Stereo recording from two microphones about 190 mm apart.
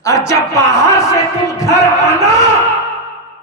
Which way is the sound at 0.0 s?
15° left (ahead or behind).